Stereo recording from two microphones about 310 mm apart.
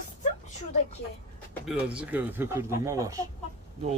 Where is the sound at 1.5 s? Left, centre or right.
Centre.